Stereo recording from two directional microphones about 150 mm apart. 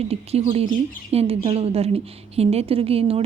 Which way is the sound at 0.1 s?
45° right (ahead or behind).